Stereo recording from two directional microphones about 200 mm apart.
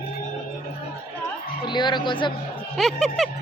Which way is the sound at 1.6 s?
20° left (ahead or behind).